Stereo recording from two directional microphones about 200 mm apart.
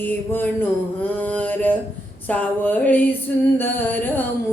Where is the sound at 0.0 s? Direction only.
10° left (ahead or behind).